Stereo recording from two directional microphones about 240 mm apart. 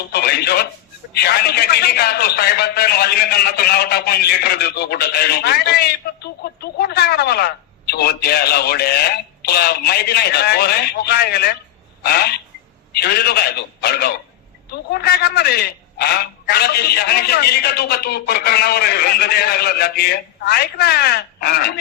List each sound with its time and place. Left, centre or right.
0.1 s a man's voice: left